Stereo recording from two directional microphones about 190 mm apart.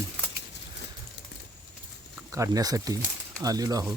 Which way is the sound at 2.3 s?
20° right (ahead or behind).